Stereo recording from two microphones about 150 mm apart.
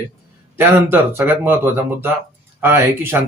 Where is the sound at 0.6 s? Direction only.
15° right (ahead or behind).